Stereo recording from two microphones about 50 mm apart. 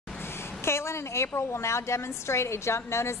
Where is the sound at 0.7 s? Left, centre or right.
Left.